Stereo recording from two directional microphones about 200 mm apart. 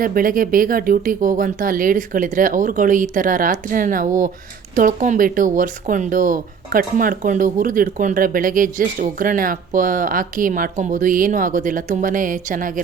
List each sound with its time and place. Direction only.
0.0 s speech: 45° right (ahead or behind)